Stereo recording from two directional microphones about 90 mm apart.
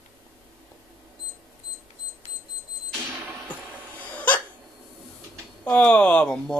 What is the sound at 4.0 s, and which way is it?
Hiccup, 15° left (ahead or behind).